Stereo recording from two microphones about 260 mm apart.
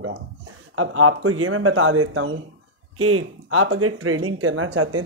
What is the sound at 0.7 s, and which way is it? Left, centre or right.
Speech, right.